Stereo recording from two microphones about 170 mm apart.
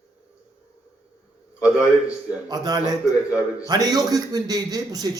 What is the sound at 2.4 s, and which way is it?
A man's voice, 20° right (ahead or behind).